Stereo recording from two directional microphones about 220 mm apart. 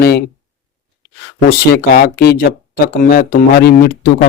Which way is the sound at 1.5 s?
45° left (ahead or behind).